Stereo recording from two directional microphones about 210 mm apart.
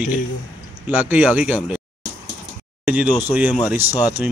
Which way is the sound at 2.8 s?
5° right (ahead or behind).